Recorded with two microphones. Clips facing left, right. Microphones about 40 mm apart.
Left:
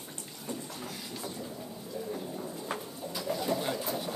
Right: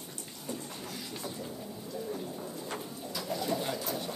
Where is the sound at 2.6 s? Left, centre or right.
Centre.